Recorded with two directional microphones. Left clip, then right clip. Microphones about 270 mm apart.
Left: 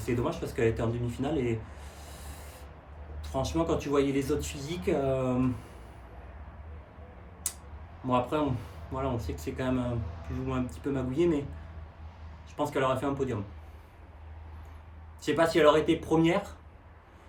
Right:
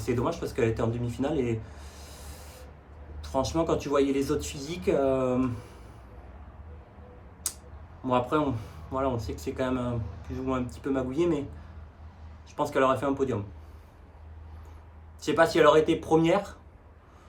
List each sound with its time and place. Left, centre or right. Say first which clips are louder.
0.0 s speech: right 2 dB; centre
3.3 s speech: right 3 dB; centre
7.4 s a sound: right 2 dB; centre
8.0 s speech: right 2 dB; centre
12.5 s speech: right 4 dB; centre
15.2 s speech: right 2 dB; centre